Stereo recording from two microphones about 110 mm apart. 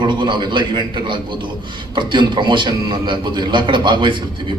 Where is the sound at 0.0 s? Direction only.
45° right (ahead or behind).